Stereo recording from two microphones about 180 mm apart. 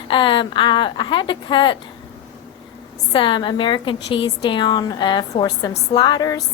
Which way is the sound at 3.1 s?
25° left (ahead or behind).